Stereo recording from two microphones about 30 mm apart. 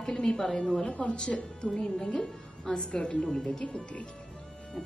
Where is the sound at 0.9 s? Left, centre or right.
Left.